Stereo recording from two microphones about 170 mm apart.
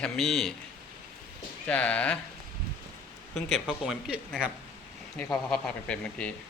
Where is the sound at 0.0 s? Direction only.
Centre (ahead or behind).